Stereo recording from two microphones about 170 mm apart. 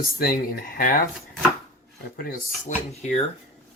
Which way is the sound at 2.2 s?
60° left (ahead or behind).